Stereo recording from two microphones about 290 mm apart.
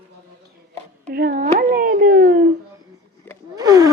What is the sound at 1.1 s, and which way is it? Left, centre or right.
Speech, right.